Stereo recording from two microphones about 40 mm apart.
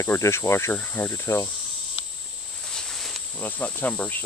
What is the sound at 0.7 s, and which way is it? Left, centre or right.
Speech, left.